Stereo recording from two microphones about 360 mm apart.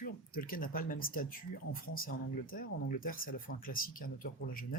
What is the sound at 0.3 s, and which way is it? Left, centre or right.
Speech, left.